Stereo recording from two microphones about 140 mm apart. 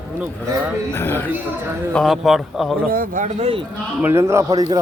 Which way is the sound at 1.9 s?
Centre (ahead or behind).